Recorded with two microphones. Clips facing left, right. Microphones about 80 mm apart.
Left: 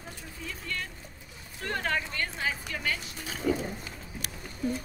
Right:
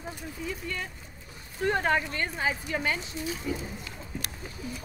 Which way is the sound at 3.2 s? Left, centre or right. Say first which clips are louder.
Left 7 dB; left.